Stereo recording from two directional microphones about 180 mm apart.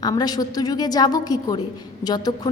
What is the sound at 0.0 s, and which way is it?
A woman's voice, 20° left (ahead or behind).